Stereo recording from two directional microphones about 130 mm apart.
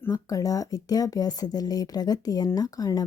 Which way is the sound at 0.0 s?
25° left (ahead or behind).